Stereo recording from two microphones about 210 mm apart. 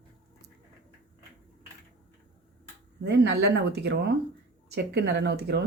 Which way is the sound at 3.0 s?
55° right (ahead or behind).